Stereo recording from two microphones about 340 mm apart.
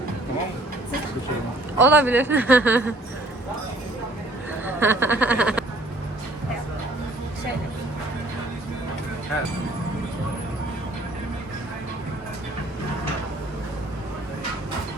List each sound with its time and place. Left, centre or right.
1.8 s a woman's voice: centre
4.6 s speech: centre